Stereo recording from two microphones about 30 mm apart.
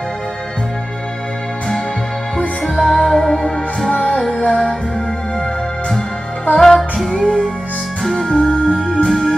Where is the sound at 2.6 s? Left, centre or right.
Centre.